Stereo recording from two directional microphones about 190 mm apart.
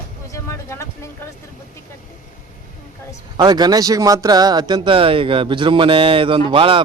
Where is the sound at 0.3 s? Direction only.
15° left (ahead or behind).